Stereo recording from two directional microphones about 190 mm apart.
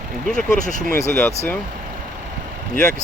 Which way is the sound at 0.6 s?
40° left (ahead or behind).